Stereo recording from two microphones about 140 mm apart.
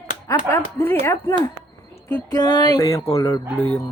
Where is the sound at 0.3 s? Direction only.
20° left (ahead or behind).